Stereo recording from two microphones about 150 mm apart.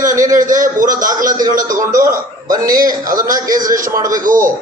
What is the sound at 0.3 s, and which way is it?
A man's voice, 60° right (ahead or behind).